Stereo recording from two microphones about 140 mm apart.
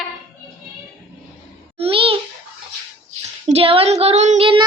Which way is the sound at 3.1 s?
50° right (ahead or behind).